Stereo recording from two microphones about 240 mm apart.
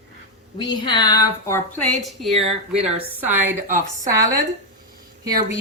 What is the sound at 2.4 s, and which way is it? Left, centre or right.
Speech, right.